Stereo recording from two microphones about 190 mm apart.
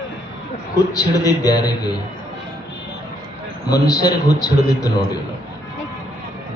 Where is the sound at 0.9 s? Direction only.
20° left (ahead or behind).